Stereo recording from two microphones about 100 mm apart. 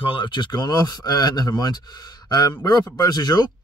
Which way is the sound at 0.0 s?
55° left (ahead or behind).